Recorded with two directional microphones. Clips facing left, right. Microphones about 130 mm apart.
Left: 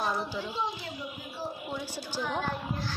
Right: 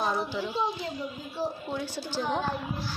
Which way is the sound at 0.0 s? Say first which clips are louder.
Right 2 dB; 15° right (ahead or behind).